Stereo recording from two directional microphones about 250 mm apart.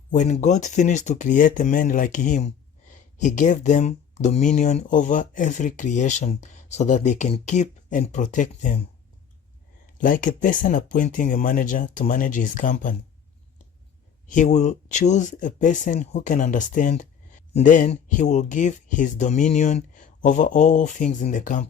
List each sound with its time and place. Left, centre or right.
0.1 s speech: left
10.0 s speech: left
14.3 s speech: left